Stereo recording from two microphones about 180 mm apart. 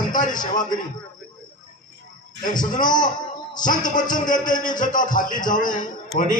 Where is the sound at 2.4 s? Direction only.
45° left (ahead or behind).